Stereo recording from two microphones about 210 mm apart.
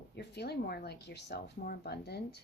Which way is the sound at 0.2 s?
50° left (ahead or behind).